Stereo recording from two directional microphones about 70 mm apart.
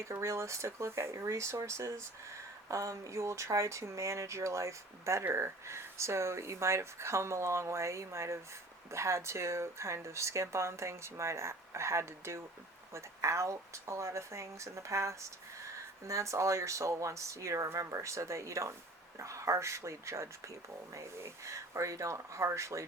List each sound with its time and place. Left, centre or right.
0.0 s speech: right